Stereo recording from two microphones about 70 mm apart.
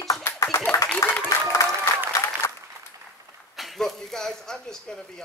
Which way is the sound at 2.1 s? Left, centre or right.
Left.